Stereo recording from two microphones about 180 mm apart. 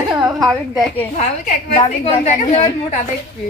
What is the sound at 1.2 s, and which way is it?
A woman's voice, 40° left (ahead or behind).